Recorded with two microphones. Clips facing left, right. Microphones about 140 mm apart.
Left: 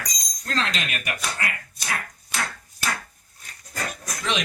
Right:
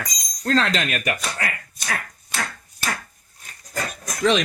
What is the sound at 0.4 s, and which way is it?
Speech, 45° right (ahead or behind).